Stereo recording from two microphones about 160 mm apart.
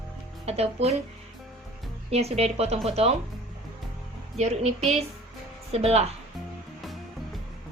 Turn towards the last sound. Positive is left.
turn(degrees=-40)  # may be behind; listen again after turning